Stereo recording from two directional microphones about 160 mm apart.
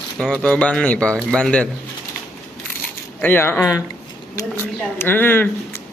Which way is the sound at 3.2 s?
10° left (ahead or behind).